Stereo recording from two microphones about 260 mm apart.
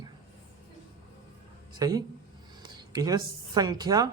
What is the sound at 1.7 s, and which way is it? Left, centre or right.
Speech, centre.